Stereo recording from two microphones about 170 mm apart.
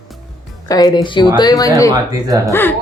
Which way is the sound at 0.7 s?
25° left (ahead or behind).